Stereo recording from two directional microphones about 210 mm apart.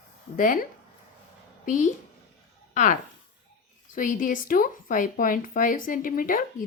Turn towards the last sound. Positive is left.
turn(degrees=40)  # may be behind; listen again after turning